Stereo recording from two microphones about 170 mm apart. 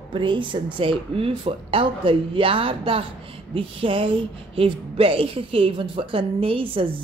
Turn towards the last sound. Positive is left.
turn(degrees=-30)  # may be behind; listen again after turning